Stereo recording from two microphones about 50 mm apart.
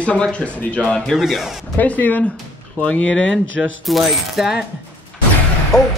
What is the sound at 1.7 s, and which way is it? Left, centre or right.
Speech, left.